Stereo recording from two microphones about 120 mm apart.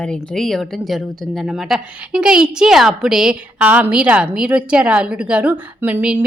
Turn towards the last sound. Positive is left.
turn(degrees=-15)  # may be behind; listen again after turning